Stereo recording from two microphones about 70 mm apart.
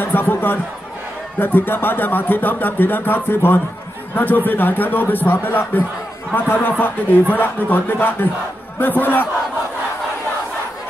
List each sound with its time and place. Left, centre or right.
0.0 s speech: left